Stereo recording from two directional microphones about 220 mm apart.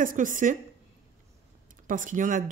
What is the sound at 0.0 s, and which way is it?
Speech, 35° right (ahead or behind).